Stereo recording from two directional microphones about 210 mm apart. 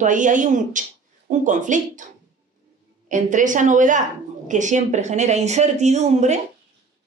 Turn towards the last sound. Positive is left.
turn(degrees=-35)  # may be behind; listen again after turning